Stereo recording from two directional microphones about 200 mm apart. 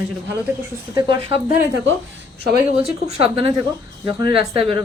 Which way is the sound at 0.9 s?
25° right (ahead or behind).